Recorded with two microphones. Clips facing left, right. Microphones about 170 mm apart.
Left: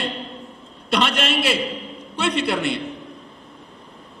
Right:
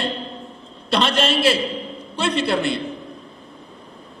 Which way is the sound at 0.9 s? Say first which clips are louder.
Right 2 dB; 30° right (ahead or behind).